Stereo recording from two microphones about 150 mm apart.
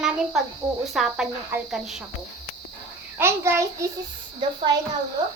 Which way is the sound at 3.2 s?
15° right (ahead or behind).